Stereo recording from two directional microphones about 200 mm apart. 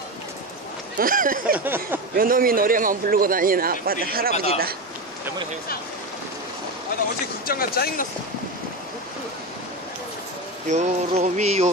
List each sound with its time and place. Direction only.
0.9 s a man's voice: 45° right (ahead or behind)
1.6 s speech: 10° right (ahead or behind)
2.1 s a man's voice: 45° right (ahead or behind)
7.4 s speech: 50° left (ahead or behind)
10.7 s music: 35° right (ahead or behind)